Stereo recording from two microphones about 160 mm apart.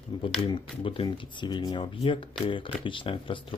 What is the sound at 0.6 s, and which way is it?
Speech, 35° left (ahead or behind).